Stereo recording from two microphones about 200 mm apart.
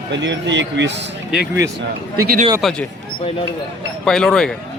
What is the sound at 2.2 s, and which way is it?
Speech, 45° right (ahead or behind).